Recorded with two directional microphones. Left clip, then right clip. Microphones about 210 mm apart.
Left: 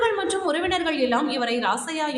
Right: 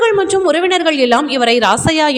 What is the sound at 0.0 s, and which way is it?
A woman's voice, 35° right (ahead or behind).